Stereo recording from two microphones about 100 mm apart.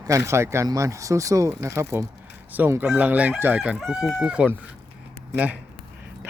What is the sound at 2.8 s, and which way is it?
Chicken, 15° right (ahead or behind).